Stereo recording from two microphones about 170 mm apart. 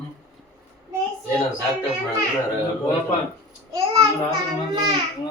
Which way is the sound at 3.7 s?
30° right (ahead or behind).